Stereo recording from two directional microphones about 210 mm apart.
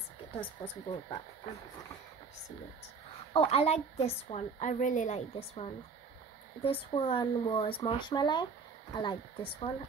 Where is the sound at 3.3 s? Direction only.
25° left (ahead or behind).